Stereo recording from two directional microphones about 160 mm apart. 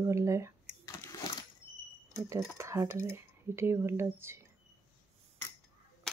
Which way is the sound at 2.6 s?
20° right (ahead or behind).